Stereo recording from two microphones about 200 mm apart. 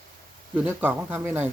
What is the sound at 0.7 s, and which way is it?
Speech, 10° right (ahead or behind).